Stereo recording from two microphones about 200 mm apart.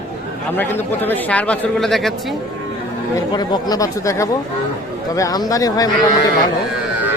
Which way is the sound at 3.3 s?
20° left (ahead or behind).